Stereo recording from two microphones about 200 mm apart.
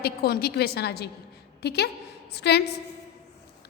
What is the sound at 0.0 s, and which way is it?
A woman's voice, 50° left (ahead or behind).